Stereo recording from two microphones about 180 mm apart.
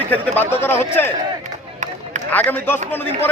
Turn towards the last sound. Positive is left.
turn(degrees=10)  # may be behind; listen again after turning